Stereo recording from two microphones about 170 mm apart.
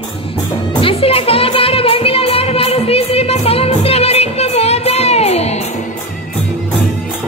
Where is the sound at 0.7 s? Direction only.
35° left (ahead or behind).